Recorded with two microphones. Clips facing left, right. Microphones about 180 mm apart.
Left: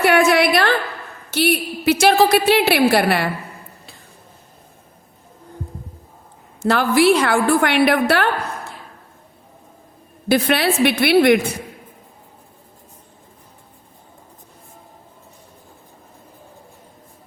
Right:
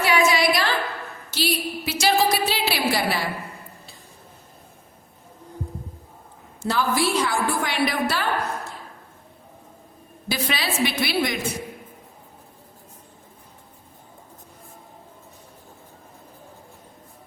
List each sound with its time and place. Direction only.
0.0 s a sound: 55° left (ahead or behind)
1.3 s a woman's voice: 60° left (ahead or behind)
6.6 s a woman's voice: 70° left (ahead or behind)
10.2 s a woman's voice: 60° left (ahead or behind)